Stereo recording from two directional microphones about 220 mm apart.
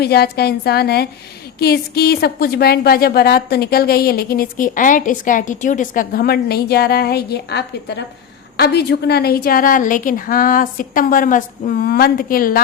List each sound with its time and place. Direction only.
0.0 s a woman's voice: 45° left (ahead or behind)